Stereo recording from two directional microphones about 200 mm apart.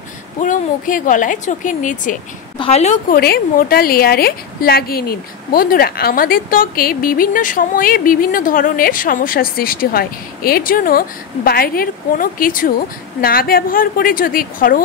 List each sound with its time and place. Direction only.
0.4 s a woman's voice: 40° left (ahead or behind)
3.2 s a woman's voice: 50° left (ahead or behind)